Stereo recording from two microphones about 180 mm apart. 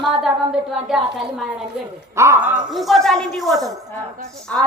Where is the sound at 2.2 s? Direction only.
15° right (ahead or behind); by 3.5 s centre (ahead or behind).